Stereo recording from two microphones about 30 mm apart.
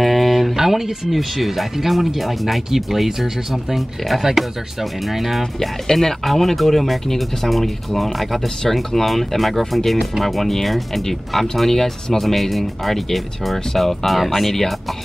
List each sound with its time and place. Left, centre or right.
0.0 s a sound: centre
0.6 s speech: centre
4.2 s speech: centre
5.4 s speech: centre